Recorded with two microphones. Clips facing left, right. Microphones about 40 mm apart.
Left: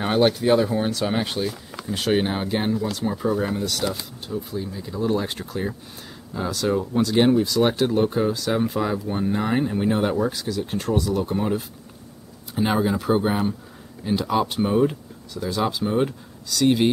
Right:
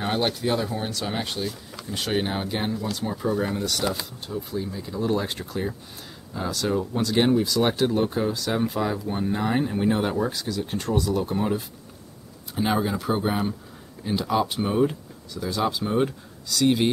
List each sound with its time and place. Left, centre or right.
0.0 s speech: centre